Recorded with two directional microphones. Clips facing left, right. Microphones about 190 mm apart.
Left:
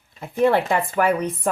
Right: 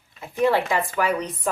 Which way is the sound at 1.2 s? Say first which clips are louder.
Left 4 dB; 25° left (ahead or behind).